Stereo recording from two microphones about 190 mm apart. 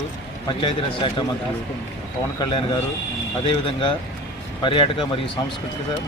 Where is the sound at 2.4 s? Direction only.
25° left (ahead or behind).